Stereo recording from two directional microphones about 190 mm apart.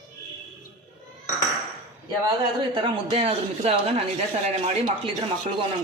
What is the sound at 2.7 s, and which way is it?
Speech, 30° right (ahead or behind).